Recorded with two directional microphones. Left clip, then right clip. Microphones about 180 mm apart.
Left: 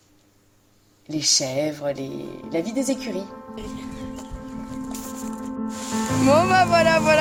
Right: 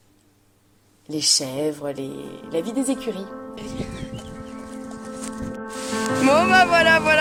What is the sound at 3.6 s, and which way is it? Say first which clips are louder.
Speech: right 2 dB; centre (ahead or behind).